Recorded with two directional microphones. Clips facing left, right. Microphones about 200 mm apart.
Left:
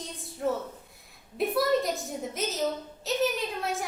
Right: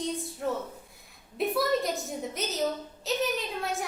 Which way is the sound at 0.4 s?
Centre (ahead or behind).